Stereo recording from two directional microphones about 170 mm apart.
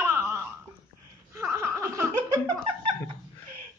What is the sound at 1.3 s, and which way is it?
Laughter, 15° right (ahead or behind).